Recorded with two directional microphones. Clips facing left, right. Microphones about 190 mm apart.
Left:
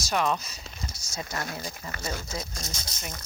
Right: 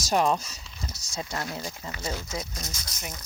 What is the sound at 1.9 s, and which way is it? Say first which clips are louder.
Speech: right 1 dB; 50° left (ahead or behind).